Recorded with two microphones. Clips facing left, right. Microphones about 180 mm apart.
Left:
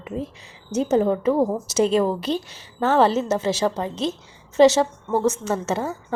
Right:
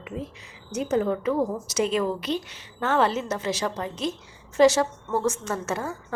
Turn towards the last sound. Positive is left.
turn(degrees=25)  # may be behind; listen again after turning